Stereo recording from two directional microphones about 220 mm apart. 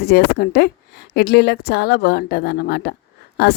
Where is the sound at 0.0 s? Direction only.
45° left (ahead or behind).